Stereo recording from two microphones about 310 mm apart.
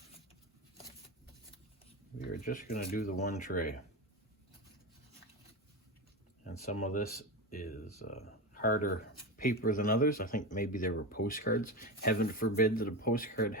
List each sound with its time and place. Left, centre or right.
2.1 s speech: left
6.4 s speech: left